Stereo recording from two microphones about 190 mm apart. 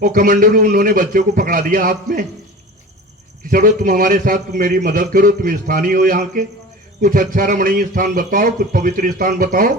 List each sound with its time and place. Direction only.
0.0 s a man's voice: 45° right (ahead or behind)
3.5 s a man's voice: 45° right (ahead or behind)